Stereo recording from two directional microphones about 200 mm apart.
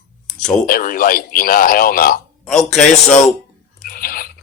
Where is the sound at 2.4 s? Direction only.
Centre (ahead or behind).